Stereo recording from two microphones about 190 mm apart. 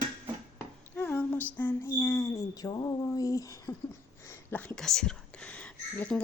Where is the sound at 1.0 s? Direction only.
10° left (ahead or behind).